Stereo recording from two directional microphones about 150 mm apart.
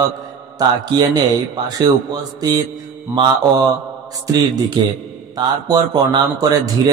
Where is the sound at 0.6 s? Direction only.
25° right (ahead or behind).